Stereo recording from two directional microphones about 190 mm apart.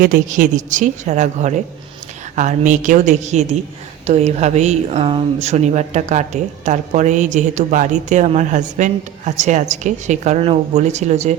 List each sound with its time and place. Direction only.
0.0 s a woman's voice: 45° right (ahead or behind)